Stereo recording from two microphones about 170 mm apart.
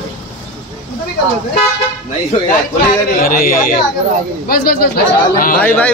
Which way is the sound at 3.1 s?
60° left (ahead or behind).